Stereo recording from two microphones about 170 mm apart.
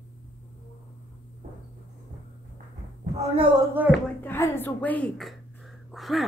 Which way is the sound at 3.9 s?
10° left (ahead or behind).